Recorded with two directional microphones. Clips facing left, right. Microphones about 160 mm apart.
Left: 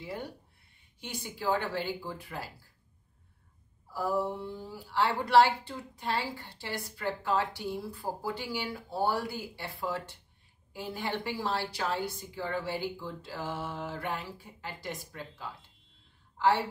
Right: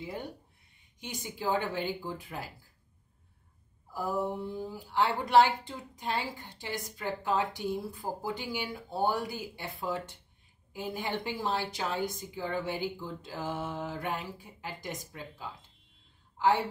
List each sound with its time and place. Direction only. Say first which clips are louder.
0.0 s speech: even; 20° right (ahead or behind)
3.9 s a woman's voice: left 1 dB; 20° right (ahead or behind)